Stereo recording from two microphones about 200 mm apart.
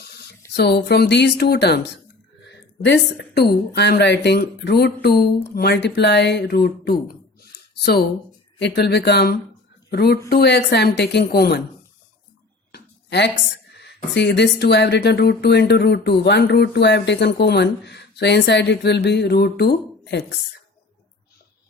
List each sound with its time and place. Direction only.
0.5 s speech: 55° left (ahead or behind)
8.6 s speech: 55° left (ahead or behind)
12.7 s a sound: 60° left (ahead or behind)
13.7 s speech: 60° left (ahead or behind)